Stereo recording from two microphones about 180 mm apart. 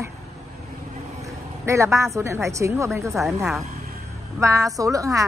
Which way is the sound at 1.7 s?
15° right (ahead or behind).